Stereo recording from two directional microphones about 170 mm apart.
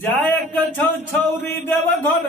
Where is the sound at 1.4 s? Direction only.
10° left (ahead or behind).